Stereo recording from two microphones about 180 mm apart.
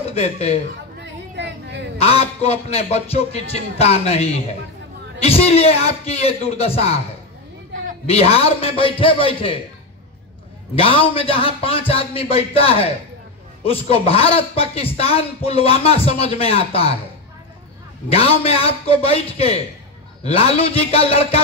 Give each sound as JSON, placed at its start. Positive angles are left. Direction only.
{"t": 0.1, "sound": "a man's voice", "side_deg": 35}
{"t": 1.3, "sound": "a sound", "side_deg": -75}
{"t": 2.0, "sound": "a man's voice", "side_deg": 35}
{"t": 8.1, "sound": "a man's voice", "side_deg": 35}
{"t": 10.8, "sound": "a man's voice", "side_deg": 30}
{"t": 18.1, "sound": "a man's voice", "side_deg": 35}